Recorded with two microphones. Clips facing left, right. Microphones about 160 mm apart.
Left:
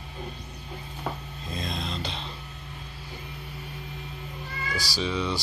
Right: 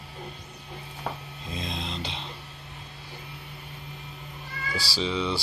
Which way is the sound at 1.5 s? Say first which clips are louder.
Left 1 dB; 20° right (ahead or behind).